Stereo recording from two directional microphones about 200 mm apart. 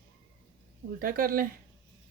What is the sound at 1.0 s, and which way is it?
Speech, 45° right (ahead or behind).